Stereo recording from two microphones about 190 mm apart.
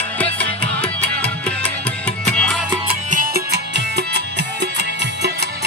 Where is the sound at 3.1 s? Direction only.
55° right (ahead or behind).